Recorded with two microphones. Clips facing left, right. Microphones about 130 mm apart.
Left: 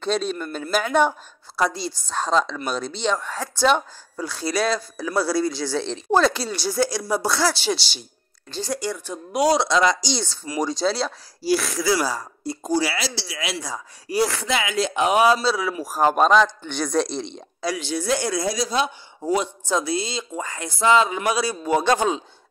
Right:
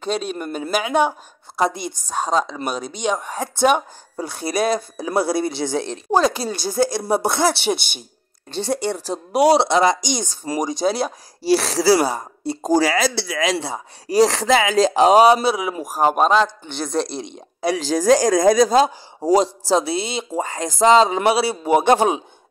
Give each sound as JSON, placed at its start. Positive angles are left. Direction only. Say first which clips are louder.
{"t": 0.0, "sound": "speech", "louder": "even", "side_deg": -10}
{"t": 6.4, "sound": "speech", "louder": "right 3 dB", "side_deg": -50}
{"t": 7.1, "sound": "speech", "louder": "right 3 dB", "side_deg": -25}
{"t": 11.5, "sound": "speech", "louder": "right 6 dB", "side_deg": -30}
{"t": 12.6, "sound": "speech", "louder": "right 6 dB", "side_deg": -40}
{"t": 13.7, "sound": "speech", "louder": "right 4 dB", "side_deg": -35}
{"t": 17.7, "sound": "a woman's voice", "louder": "right 6 dB", "side_deg": -90}
{"t": 18.4, "sound": "speech", "louder": "right 10 dB", "side_deg": -50}